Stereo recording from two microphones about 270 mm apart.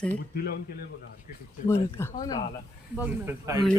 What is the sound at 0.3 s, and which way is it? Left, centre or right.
Speech, left.